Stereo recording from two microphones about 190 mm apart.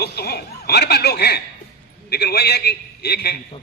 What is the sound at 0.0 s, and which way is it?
Chuckle, 60° left (ahead or behind).